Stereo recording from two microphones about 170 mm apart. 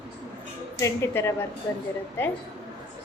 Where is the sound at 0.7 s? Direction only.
15° left (ahead or behind).